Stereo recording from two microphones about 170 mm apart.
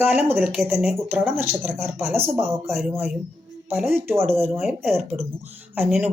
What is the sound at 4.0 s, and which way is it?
Speech, 15° right (ahead or behind).